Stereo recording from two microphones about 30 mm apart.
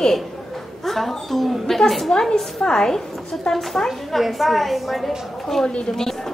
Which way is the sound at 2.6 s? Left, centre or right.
Left.